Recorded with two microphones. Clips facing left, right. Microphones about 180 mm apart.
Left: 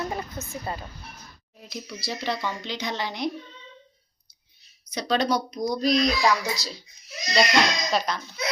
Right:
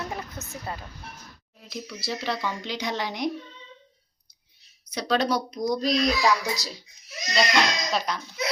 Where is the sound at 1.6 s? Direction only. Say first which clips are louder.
Right 1 dB; centre (ahead or behind).